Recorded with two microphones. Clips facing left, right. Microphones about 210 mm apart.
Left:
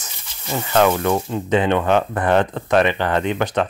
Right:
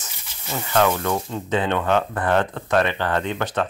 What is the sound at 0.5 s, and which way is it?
Speech, 20° left (ahead or behind).